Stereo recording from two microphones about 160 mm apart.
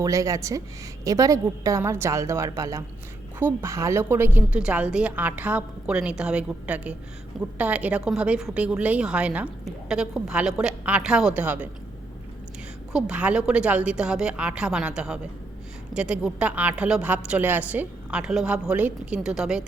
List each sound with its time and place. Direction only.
0.0 s a woman's voice: 20° right (ahead or behind)
12.9 s a woman's voice: 5° right (ahead or behind)